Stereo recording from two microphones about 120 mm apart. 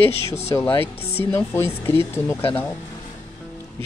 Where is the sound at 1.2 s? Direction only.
20° left (ahead or behind).